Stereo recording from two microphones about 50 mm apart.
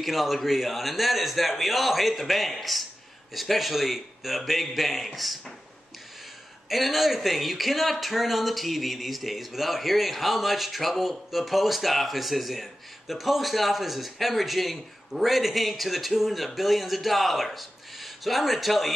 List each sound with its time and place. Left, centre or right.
0.0 s speech: centre
6.7 s speech: centre